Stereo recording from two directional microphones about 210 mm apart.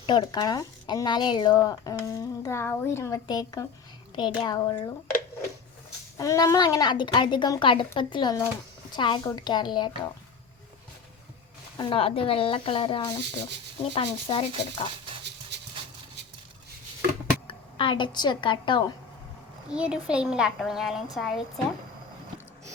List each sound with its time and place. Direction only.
0.0 s a woman's voice: 20° left (ahead or behind)
6.1 s a woman's voice: 15° left (ahead or behind)
11.8 s a woman's voice: 25° left (ahead or behind)
17.4 s speech: 25° left (ahead or behind)
19.7 s speech: 5° right (ahead or behind)